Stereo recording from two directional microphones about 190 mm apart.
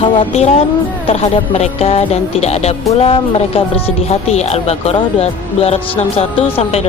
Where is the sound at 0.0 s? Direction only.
30° left (ahead or behind).